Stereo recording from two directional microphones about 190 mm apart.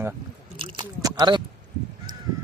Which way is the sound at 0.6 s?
20° right (ahead or behind).